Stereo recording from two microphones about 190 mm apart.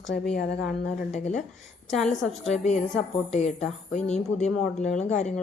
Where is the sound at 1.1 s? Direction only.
35° left (ahead or behind).